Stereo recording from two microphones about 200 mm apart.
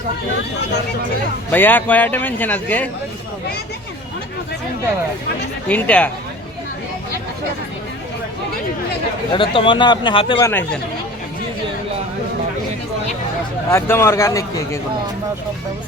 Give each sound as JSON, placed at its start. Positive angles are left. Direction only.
{"t": 1.5, "sound": "a man's voice", "side_deg": 10}
{"t": 5.6, "sound": "a man's voice", "side_deg": 5}
{"t": 9.3, "sound": "speech", "side_deg": 25}
{"t": 13.7, "sound": "a man's voice", "side_deg": 10}